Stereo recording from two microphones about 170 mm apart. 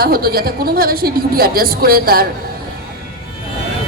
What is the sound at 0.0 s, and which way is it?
A woman's voice, 65° right (ahead or behind).